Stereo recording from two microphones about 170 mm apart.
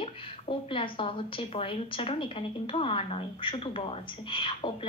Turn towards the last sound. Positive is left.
turn(degrees=30)  # may be behind; listen again after turning